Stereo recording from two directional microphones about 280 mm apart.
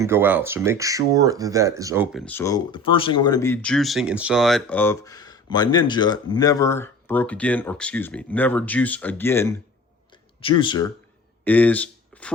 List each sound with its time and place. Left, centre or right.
0.0 s speech: centre
2.1 s speech: centre
10.1 s a sound: centre
11.4 s speech: centre